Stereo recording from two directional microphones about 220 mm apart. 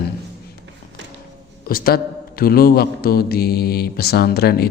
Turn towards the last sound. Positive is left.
turn(degrees=45)  # may be behind; listen again after turning